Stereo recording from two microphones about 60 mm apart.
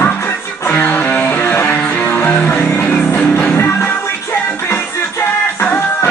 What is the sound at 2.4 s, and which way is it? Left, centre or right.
Music, left.